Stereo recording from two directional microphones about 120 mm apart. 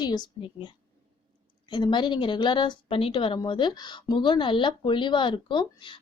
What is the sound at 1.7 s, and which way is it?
A woman's voice, 40° left (ahead or behind).